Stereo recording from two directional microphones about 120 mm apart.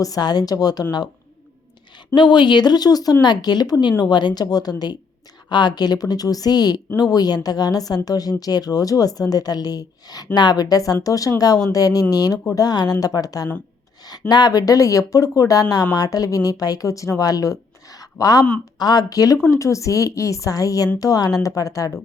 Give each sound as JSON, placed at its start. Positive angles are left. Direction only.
{"t": 0.0, "sound": "speech", "side_deg": 30}
{"t": 2.1, "sound": "a woman's voice", "side_deg": 40}
{"t": 18.0, "sound": "a sound", "side_deg": 30}
{"t": 18.8, "sound": "a woman's voice", "side_deg": 35}